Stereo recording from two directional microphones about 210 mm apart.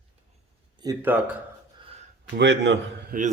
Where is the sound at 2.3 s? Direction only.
60° right (ahead or behind).